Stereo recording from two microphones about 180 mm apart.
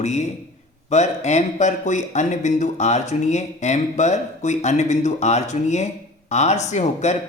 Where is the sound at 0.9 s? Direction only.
40° left (ahead or behind).